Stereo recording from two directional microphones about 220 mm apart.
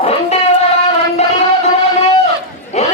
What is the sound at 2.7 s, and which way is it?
Battle cry, 30° left (ahead or behind).